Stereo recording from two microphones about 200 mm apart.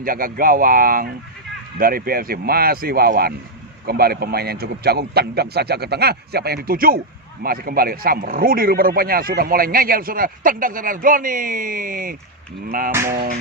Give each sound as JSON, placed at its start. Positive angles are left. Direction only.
{"t": 0.0, "sound": "speech", "side_deg": -45}